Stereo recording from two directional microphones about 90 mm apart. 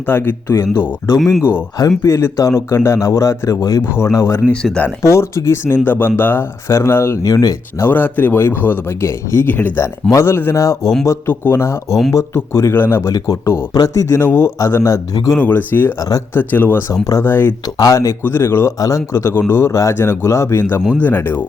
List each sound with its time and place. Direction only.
0.1 s speech: 25° left (ahead or behind)
2.0 s speech: 30° left (ahead or behind)
4.6 s speech: 10° left (ahead or behind)
5.0 s speech: 35° left (ahead or behind)
7.9 s speech: 20° left (ahead or behind)
13.1 s speech: 40° left (ahead or behind)
15.4 s speech: 20° left (ahead or behind)
16.0 s speech: 40° left (ahead or behind)
16.3 s speech: 20° left (ahead or behind)
17.7 s speech: 40° left (ahead or behind)
18.2 s speech: 25° left (ahead or behind)
18.8 s speech: 40° left (ahead or behind); by 21.4 s 20° left (ahead or behind)